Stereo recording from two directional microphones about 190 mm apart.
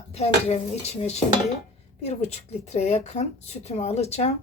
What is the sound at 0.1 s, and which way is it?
A woman's voice, 35° left (ahead or behind).